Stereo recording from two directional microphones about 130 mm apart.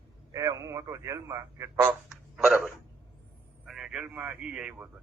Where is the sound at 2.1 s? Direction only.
5° right (ahead or behind).